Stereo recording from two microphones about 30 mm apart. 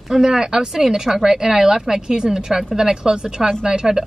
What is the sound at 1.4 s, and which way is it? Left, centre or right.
A woman's voice, centre.